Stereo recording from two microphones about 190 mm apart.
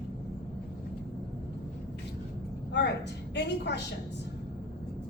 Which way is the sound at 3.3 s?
65° left (ahead or behind).